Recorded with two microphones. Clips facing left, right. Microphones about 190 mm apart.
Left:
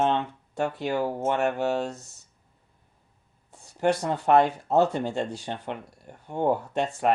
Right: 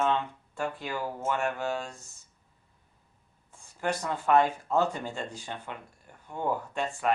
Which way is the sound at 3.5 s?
70° left (ahead or behind).